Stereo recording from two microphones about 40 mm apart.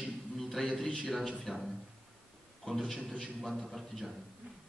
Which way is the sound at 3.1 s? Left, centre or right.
Centre.